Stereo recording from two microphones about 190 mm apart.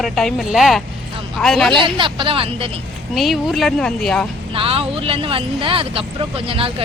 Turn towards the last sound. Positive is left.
turn(degrees=-30)  # may be behind; listen again after turning